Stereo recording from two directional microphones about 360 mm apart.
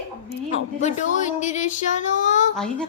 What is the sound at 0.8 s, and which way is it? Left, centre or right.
Speech, centre.